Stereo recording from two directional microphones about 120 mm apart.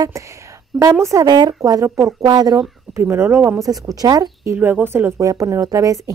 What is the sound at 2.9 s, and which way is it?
Speech, 20° right (ahead or behind).